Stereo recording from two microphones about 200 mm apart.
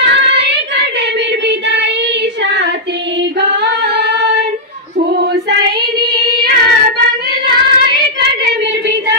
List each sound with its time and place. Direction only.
0.0 s child singing: 60° right (ahead or behind)
2.4 s child singing: 60° right (ahead or behind)
3.3 s female singing: 55° right (ahead or behind)
5.2 s child singing: 55° right (ahead or behind)
7.4 s female singing: 55° right (ahead or behind)